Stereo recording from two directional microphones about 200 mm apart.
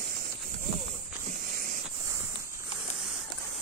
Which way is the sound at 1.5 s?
45° right (ahead or behind).